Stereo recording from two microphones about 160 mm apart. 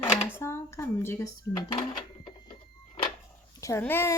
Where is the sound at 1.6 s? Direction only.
30° left (ahead or behind).